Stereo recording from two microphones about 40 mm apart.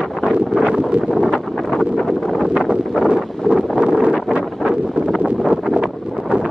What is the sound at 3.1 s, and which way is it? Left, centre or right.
Wind noise, right.